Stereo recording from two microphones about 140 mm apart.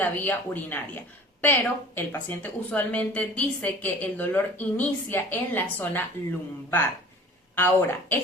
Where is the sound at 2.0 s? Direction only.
10° left (ahead or behind).